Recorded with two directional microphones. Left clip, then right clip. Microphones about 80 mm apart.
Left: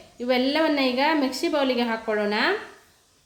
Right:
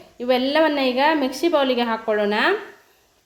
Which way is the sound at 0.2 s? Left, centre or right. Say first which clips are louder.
Right 4 dB; right.